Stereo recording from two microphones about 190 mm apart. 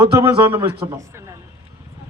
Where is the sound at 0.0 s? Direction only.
10° right (ahead or behind).